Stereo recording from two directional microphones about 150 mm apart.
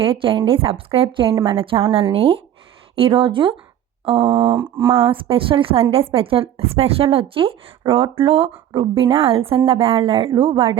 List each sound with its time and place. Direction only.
0.0 s a woman's voice: 35° right (ahead or behind)
4.2 s a sound: 30° right (ahead or behind)
4.9 s a woman's voice: 35° right (ahead or behind)